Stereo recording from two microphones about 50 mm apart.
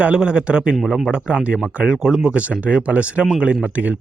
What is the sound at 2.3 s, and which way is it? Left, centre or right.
Speech, right.